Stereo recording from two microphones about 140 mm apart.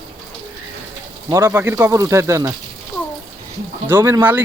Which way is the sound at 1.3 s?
20° right (ahead or behind).